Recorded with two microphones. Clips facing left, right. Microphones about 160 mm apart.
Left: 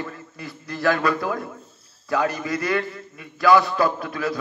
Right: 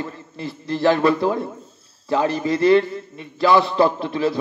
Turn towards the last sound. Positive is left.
turn(degrees=-25)  # may be behind; listen again after turning